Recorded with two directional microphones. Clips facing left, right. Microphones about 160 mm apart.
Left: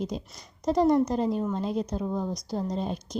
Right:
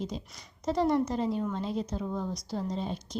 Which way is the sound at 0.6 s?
40° left (ahead or behind).